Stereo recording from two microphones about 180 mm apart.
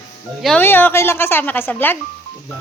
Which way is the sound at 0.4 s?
10° left (ahead or behind).